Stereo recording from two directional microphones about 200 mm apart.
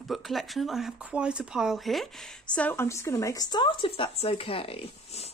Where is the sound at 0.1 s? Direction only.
Centre (ahead or behind); by 5.3 s 30° left (ahead or behind).